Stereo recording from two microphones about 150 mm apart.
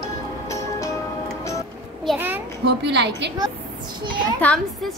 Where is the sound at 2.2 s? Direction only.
15° right (ahead or behind).